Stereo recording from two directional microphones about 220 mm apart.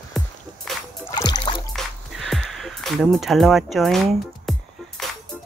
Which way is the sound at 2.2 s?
Centre (ahead or behind).